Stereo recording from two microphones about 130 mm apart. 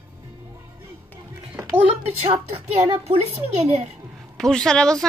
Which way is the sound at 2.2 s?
55° right (ahead or behind).